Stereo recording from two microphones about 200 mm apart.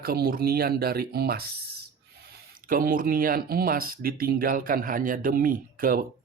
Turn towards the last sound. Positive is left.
turn(degrees=-45)  # may be behind; listen again after turning